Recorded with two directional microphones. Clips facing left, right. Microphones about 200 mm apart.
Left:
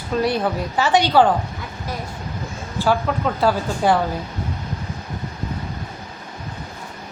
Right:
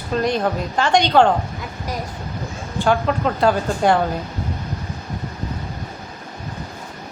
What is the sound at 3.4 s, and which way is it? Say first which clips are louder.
Speech: right 2 dB; 5° left (ahead or behind).